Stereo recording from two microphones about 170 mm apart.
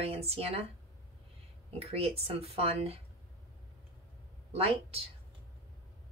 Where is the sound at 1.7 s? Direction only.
35° right (ahead or behind).